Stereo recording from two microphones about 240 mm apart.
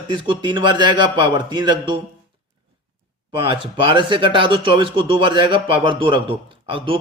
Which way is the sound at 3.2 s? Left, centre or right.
Right.